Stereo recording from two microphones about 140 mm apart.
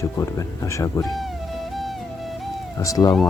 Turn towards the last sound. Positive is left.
turn(degrees=25)  # may be behind; listen again after turning